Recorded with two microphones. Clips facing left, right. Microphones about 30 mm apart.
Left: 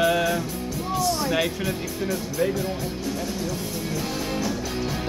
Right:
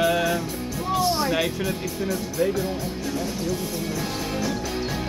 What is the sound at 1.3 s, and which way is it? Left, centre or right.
Speech, centre.